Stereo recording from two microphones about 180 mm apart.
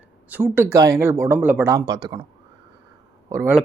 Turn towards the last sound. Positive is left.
turn(degrees=-15)  # may be behind; listen again after turning